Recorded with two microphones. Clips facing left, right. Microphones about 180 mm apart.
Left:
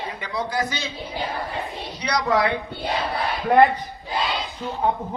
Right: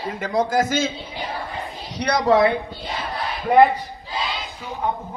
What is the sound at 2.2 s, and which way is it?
Speech, 30° right (ahead or behind).